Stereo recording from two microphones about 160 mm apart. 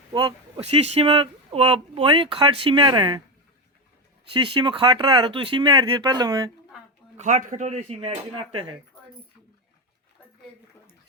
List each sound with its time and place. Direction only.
0.1 s speech: 30° right (ahead or behind)
4.3 s speech: 35° right (ahead or behind)
7.2 s speech: 50° right (ahead or behind); by 8.7 s 35° right (ahead or behind)